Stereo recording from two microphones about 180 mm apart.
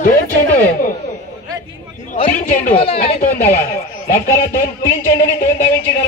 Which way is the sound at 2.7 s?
30° left (ahead or behind).